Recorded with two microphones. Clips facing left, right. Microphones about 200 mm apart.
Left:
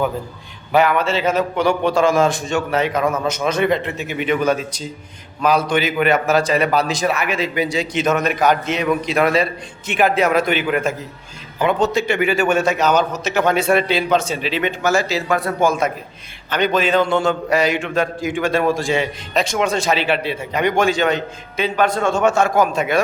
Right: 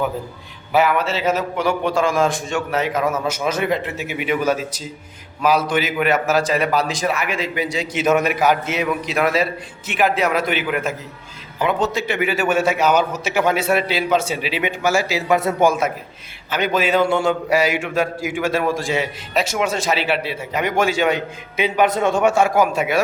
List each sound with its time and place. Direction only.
0.7 s a man's voice: 5° right (ahead or behind)
15.4 s speech: 25° right (ahead or behind)
16.5 s a man's voice: 5° right (ahead or behind)